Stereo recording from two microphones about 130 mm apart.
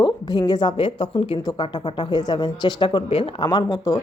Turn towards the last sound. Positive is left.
turn(degrees=25)  # may be behind; listen again after turning